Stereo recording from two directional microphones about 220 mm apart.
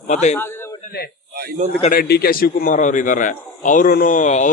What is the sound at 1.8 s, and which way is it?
Speech, 40° left (ahead or behind).